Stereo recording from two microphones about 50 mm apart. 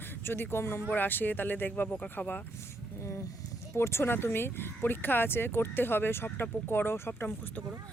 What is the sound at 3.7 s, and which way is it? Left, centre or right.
Speech, left.